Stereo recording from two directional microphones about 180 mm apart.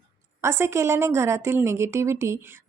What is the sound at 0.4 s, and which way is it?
A woman's voice, 15° right (ahead or behind).